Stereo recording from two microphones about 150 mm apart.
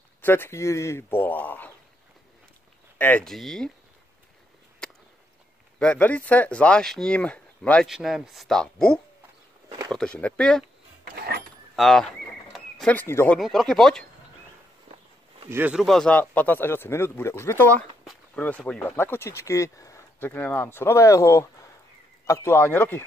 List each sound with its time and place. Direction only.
0.2 s speech: 15° left (ahead or behind)
3.0 s speech: 10° left (ahead or behind)
5.8 s speech: 10° left (ahead or behind)
7.9 s speech: 5° right (ahead or behind)
9.7 s a sound: 25° right (ahead or behind)
9.9 s speech: 10° left (ahead or behind)
11.1 s a sound: 90° right
11.7 s speech: centre (ahead or behind)
12.5 s a sound: 5° left (ahead or behind)
13.4 s speech: centre (ahead or behind)
15.5 s speech: 10° right (ahead or behind)
15.8 s speech: 5° left (ahead or behind)